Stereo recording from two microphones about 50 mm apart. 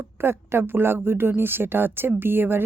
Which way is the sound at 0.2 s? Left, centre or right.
Right.